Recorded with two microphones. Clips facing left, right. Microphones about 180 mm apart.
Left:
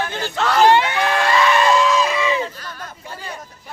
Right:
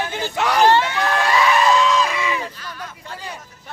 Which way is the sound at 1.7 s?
5° left (ahead or behind).